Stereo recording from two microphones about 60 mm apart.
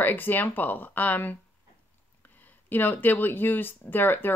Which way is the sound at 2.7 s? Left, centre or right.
Left.